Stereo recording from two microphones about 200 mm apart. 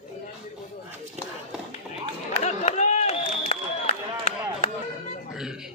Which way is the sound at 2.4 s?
35° left (ahead or behind).